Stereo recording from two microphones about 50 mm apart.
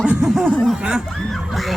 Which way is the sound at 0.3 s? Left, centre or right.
Centre.